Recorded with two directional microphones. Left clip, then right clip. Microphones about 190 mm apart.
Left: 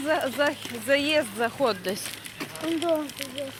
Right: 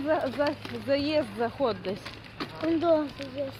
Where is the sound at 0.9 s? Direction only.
5° left (ahead or behind).